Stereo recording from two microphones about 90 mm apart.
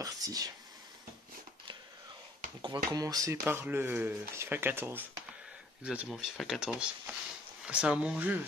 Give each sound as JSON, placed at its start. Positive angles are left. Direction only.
{"t": 0.0, "sound": "speech", "side_deg": -45}
{"t": 2.6, "sound": "speech", "side_deg": -50}
{"t": 3.4, "sound": "speech", "side_deg": -25}
{"t": 6.0, "sound": "speech", "side_deg": 0}